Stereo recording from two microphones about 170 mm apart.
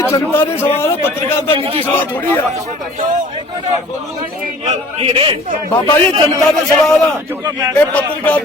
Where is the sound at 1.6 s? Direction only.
30° right (ahead or behind).